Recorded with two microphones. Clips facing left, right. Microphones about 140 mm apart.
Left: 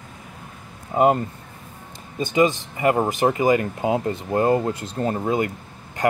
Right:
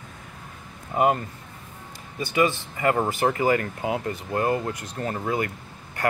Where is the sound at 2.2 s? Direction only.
20° left (ahead or behind).